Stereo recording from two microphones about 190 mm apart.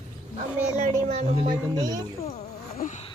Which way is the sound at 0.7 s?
35° right (ahead or behind).